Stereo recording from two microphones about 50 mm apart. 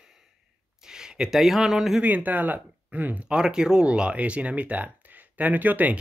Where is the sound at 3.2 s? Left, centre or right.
Centre; by 5.9 s right.